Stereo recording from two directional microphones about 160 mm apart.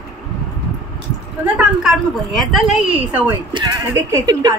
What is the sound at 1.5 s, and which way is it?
A woman's voice, centre (ahead or behind).